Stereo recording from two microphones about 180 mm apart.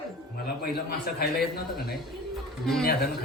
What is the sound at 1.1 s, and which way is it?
Speech, 55° left (ahead or behind).